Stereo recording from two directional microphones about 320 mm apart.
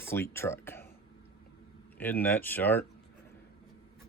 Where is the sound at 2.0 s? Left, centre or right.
Centre.